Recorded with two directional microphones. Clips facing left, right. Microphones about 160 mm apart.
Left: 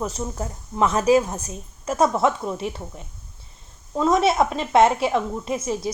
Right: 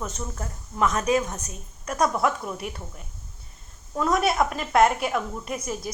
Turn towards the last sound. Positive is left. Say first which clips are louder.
# left 6 dB
turn(degrees=25)  # may be behind; listen again after turning